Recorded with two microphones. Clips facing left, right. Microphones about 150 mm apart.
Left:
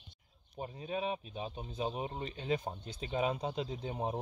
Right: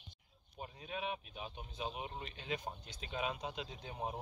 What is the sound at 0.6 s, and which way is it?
Speech, 30° left (ahead or behind).